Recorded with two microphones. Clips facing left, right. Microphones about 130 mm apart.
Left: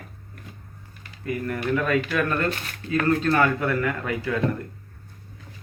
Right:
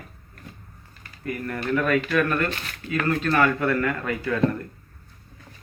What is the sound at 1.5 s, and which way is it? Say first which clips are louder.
A man's voice: right 1 dB; 10° left (ahead or behind).